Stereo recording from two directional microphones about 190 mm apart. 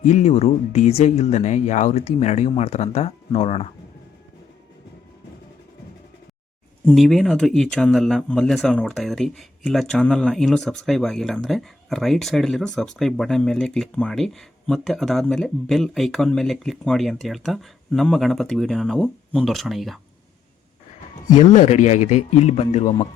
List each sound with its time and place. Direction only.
0.0 s speech: 35° left (ahead or behind)
6.8 s speech: centre (ahead or behind)
21.3 s speech: 40° left (ahead or behind)